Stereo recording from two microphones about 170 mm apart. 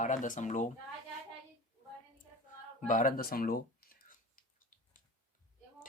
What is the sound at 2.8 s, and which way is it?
Speech, 50° left (ahead or behind).